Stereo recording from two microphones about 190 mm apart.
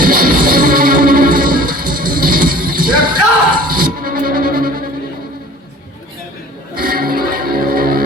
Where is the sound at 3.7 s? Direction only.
50° right (ahead or behind).